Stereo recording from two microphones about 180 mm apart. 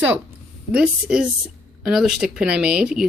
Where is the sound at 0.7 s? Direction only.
5° right (ahead or behind).